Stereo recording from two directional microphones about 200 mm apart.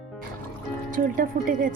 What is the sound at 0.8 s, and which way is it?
Speech, 45° right (ahead or behind).